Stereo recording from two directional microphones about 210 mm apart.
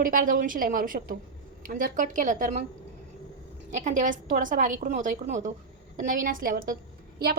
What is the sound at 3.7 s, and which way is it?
A woman's voice, 35° right (ahead or behind).